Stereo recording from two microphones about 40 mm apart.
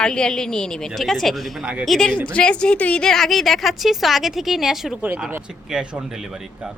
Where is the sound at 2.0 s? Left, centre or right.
Left.